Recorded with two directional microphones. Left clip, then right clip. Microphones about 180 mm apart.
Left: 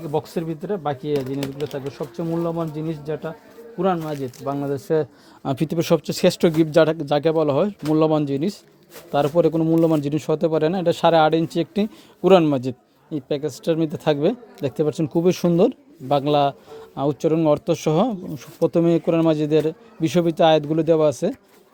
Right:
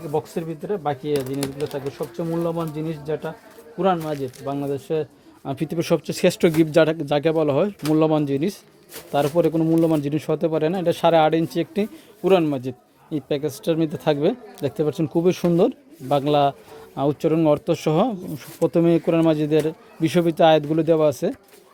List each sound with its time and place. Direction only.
0.1 s speech: 40° left (ahead or behind)
5.6 s speech: 20° left (ahead or behind)
12.2 s a man's voice: 25° left (ahead or behind)
13.1 s speech: centre (ahead or behind)